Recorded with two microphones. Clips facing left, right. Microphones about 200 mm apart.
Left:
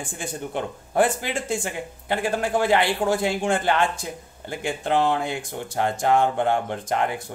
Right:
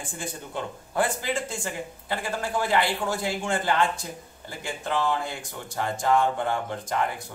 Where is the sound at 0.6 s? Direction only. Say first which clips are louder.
Left 5 dB; 60° left (ahead or behind).